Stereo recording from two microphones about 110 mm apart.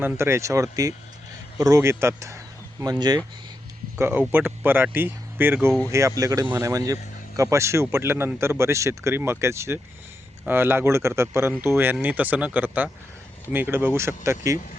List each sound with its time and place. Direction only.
0.0 s speech: 25° right (ahead or behind)
2.8 s speech: 35° right (ahead or behind)
3.9 s speech: 20° right (ahead or behind)